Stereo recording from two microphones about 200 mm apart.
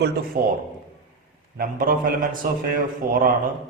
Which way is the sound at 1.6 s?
45° right (ahead or behind).